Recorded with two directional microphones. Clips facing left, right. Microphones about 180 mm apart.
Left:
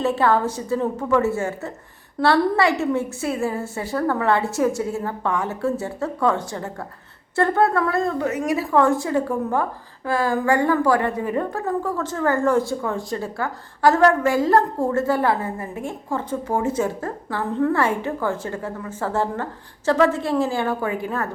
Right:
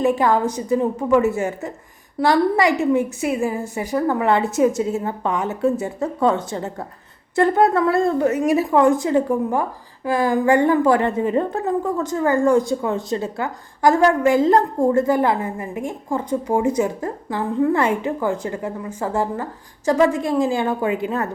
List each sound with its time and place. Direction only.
0.0 s a woman's voice: 15° right (ahead or behind)